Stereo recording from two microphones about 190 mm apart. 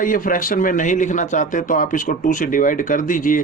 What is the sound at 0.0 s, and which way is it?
A man's voice, 45° left (ahead or behind).